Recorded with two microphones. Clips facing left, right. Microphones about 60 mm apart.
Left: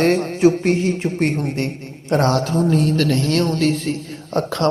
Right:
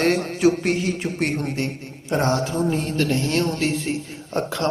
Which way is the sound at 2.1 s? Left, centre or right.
Left.